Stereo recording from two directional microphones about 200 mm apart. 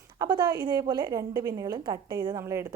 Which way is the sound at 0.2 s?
20° right (ahead or behind).